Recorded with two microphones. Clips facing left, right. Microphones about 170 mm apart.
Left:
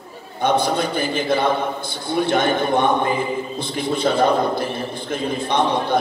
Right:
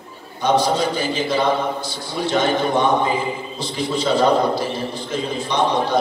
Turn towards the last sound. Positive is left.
turn(degrees=55)  # may be behind; listen again after turning